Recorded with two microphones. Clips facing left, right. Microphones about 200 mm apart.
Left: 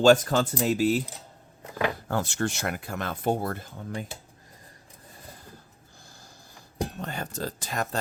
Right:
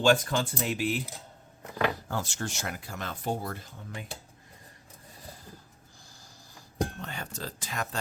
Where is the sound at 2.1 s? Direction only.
60° left (ahead or behind).